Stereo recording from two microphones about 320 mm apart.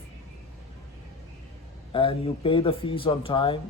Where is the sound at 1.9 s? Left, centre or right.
Centre.